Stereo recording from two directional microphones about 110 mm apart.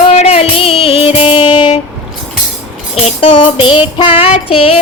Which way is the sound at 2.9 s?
70° left (ahead or behind).